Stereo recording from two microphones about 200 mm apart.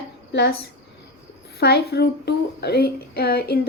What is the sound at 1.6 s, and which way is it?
Speech, 55° left (ahead or behind).